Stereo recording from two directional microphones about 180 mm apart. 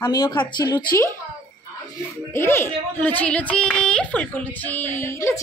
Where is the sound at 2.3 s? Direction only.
15° left (ahead or behind).